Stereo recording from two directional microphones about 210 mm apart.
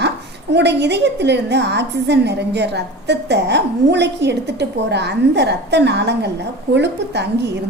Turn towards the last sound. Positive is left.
turn(degrees=-55)  # may be behind; listen again after turning